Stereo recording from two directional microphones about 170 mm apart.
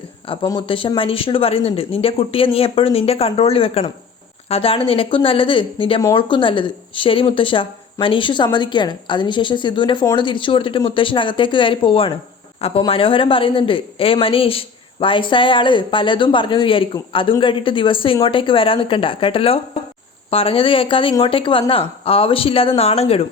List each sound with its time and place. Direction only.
0.3 s a woman's voice: 25° left (ahead or behind)